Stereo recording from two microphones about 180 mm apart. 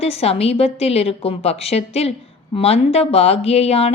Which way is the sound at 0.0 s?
35° left (ahead or behind).